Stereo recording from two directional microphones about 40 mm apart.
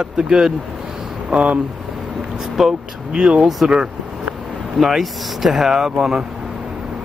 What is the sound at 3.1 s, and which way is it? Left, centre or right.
Speech, right.